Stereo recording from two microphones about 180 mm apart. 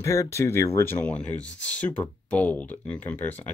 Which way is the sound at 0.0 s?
15° left (ahead or behind).